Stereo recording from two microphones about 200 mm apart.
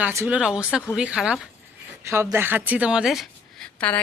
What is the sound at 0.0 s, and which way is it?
A woman's voice, 10° right (ahead or behind).